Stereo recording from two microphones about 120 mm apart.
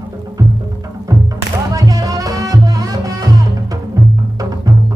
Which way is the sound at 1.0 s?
25° right (ahead or behind).